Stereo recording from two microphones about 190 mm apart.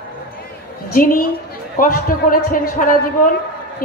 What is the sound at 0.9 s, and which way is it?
Speech, 45° left (ahead or behind).